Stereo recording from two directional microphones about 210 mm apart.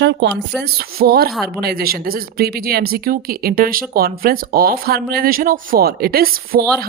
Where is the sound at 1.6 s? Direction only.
45° right (ahead or behind).